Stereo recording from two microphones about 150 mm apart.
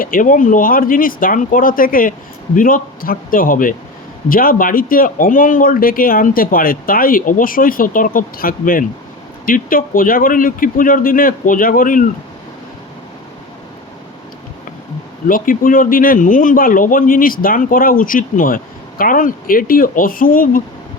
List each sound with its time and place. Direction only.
0.0 s speech: 65° left (ahead or behind)
15.3 s speech: 65° left (ahead or behind)